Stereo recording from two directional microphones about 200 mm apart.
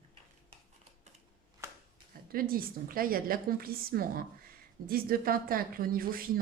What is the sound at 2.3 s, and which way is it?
A woman's voice, 45° right (ahead or behind).